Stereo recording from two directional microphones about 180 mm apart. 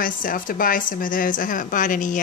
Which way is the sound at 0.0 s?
50° left (ahead or behind).